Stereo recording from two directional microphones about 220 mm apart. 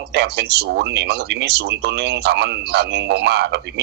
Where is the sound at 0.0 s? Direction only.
50° right (ahead or behind).